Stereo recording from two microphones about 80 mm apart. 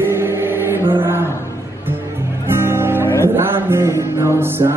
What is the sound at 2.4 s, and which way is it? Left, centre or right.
Music, right.